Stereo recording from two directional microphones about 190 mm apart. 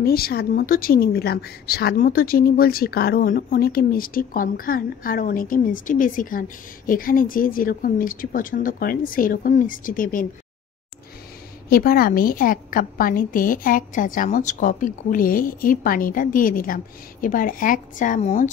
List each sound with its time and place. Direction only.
0.0 s speech: 55° left (ahead or behind)
11.7 s speech: 50° left (ahead or behind)